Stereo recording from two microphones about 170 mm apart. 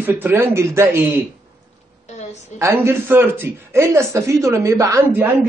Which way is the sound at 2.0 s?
40° left (ahead or behind).